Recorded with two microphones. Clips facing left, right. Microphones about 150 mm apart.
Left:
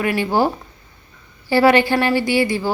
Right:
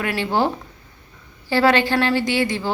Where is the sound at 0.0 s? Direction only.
5° left (ahead or behind).